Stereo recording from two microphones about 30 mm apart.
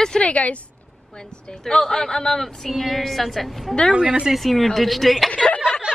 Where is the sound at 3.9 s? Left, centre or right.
Right.